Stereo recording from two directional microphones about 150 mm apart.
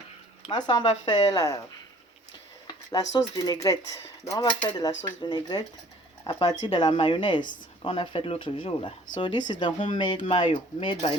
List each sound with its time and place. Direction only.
0.4 s speech: 30° left (ahead or behind)